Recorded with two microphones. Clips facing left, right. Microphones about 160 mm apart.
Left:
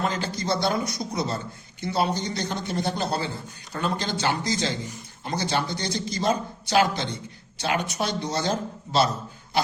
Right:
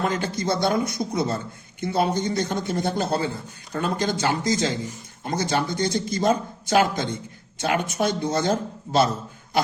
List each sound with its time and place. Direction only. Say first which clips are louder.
0.0 s speech: right 3 dB; 55° right (ahead or behind)